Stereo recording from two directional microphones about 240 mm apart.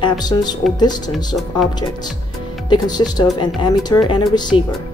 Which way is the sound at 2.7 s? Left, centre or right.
Centre.